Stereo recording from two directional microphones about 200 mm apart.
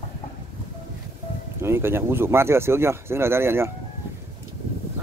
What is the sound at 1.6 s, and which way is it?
Speech, 10° right (ahead or behind).